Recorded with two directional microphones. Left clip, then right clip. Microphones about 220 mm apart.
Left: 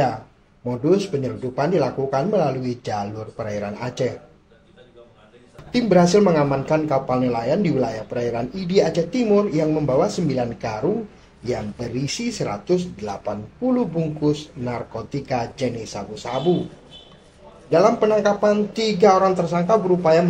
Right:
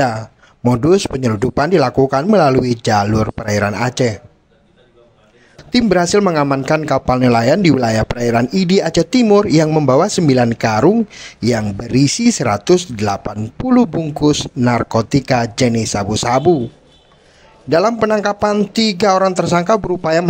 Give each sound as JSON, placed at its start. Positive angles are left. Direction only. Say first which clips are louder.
{"t": 0.7, "sound": "speech", "louder": "right 7 dB", "side_deg": -50}
{"t": 5.7, "sound": "speech", "louder": "right 3 dB", "side_deg": -50}
{"t": 17.6, "sound": "speech", "louder": "right 3 dB", "side_deg": -45}